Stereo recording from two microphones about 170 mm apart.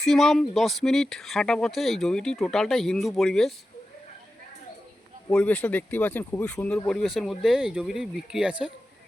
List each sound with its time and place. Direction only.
0.0 s speech: centre (ahead or behind)
5.3 s speech: 5° left (ahead or behind)